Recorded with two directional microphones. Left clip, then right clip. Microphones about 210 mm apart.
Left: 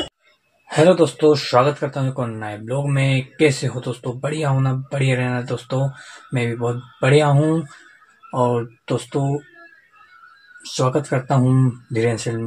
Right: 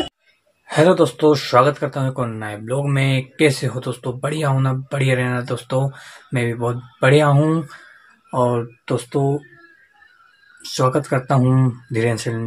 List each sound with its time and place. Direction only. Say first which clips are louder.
0.7 s speech: even; 10° right (ahead or behind)
10.8 s speech: right 2 dB; 10° right (ahead or behind)